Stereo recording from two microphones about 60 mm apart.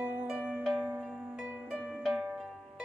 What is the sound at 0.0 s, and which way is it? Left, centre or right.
Music, right.